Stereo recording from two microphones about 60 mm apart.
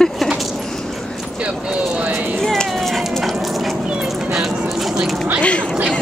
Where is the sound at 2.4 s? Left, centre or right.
Centre.